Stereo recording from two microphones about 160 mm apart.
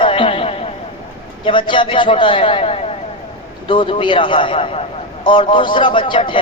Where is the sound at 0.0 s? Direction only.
35° left (ahead or behind).